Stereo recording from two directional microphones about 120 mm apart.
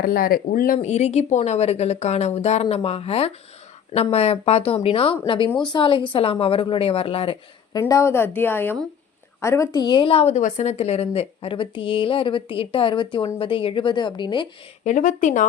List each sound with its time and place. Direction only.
0.8 s a woman's voice: 70° left (ahead or behind); by 7.3 s 50° left (ahead or behind)
7.7 s speech: 30° left (ahead or behind)
9.8 s a woman's voice: 45° left (ahead or behind)
14.8 s speech: 90° left